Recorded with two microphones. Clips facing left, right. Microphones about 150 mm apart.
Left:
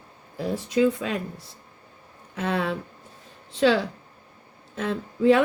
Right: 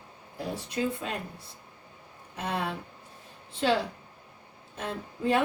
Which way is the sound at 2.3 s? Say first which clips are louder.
Left 6 dB; 90° left.